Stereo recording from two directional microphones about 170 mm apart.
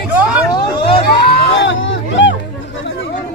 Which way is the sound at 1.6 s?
90° left.